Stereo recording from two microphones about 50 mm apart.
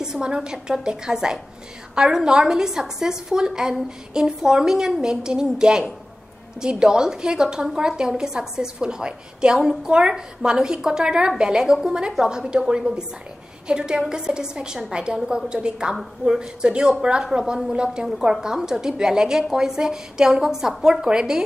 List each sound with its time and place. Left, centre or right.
0.0 s a woman's voice: centre